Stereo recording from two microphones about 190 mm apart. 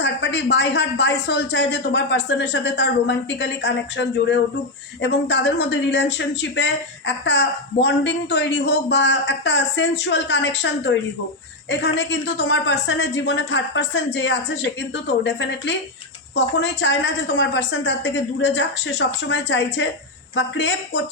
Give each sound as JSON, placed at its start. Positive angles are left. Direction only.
{"t": 0.0, "sound": "speech", "side_deg": 65}